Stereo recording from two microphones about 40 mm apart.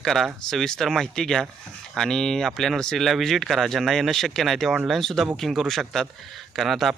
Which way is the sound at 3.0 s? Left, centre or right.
Centre.